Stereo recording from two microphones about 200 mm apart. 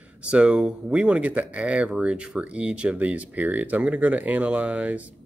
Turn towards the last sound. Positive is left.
turn(degrees=-5)  # may be behind; listen again after turning